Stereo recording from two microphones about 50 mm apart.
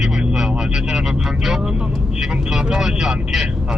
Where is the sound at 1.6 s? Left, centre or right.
Centre.